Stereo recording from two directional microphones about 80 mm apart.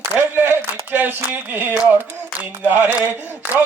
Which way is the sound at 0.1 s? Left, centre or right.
Right.